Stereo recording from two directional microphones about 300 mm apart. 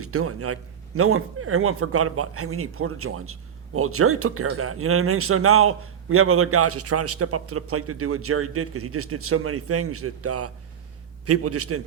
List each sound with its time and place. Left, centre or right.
0.0 s a man's voice: right